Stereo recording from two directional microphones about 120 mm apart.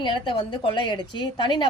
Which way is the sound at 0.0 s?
40° left (ahead or behind).